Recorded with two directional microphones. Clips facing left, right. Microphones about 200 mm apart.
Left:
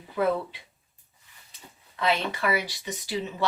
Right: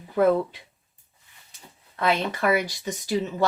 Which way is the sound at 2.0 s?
50° right (ahead or behind).